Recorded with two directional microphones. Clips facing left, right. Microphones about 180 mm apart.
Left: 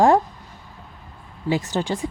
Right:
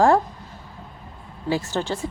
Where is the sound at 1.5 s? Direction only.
20° left (ahead or behind).